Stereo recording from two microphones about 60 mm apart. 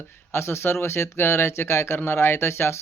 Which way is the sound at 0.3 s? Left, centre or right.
Left.